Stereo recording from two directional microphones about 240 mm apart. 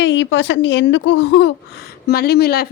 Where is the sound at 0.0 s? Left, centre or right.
Left.